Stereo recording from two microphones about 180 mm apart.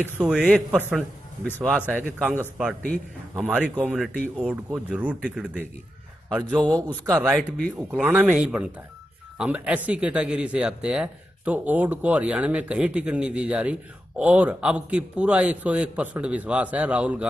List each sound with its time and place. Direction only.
0.2 s a man's voice: 5° right (ahead or behind)
1.4 s a man's voice: 5° left (ahead or behind)
2.2 s a man's voice: 5° right (ahead or behind)
2.8 s a man's voice: 5° left (ahead or behind)
3.4 s a man's voice: 10° right (ahead or behind)
6.9 s speech: 20° right (ahead or behind)
7.2 s a man's voice: 5° left (ahead or behind)
7.9 s a man's voice: 10° right (ahead or behind)